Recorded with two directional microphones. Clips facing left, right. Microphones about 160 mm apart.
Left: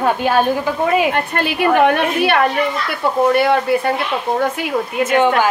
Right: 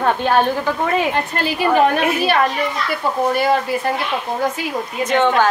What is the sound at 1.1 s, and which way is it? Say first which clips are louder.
Speech: left 1 dB; 60° left (ahead or behind).